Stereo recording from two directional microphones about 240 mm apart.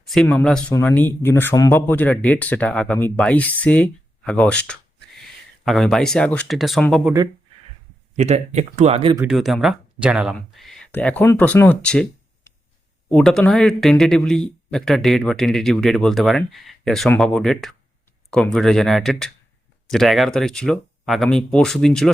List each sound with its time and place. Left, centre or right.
0.0 s speech: centre
8.1 s speech: right
9.1 s speech: centre
13.1 s speech: centre